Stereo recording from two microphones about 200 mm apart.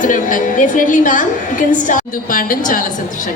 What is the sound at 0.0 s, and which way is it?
A woman's voice, 40° left (ahead or behind).